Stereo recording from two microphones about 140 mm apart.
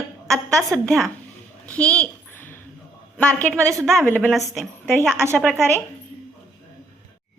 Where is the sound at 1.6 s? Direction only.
10° left (ahead or behind).